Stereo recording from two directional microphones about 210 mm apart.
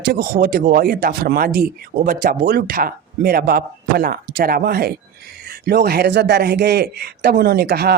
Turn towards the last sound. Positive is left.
turn(degrees=-50)  # may be behind; listen again after turning